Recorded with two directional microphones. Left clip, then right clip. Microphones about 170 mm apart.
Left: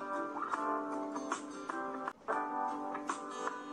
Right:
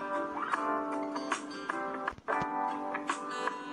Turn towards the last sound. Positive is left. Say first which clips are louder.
# right 5 dB
turn(degrees=20)  # may be behind; listen again after turning